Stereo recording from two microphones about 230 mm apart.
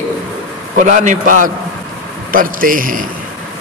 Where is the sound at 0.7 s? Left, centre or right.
Right.